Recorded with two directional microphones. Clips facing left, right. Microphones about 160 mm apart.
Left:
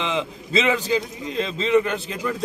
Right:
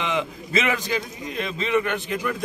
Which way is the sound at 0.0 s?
25° left (ahead or behind).